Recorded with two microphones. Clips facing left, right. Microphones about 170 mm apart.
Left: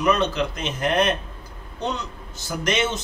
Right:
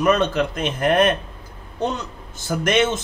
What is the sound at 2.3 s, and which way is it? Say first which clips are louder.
Speech: right 5 dB; 50° right (ahead or behind).